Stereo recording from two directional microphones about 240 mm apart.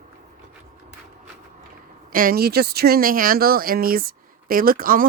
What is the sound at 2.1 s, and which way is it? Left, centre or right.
Speech, right.